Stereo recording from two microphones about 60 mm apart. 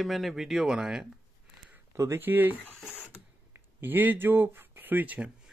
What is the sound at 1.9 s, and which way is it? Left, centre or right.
Speech, right.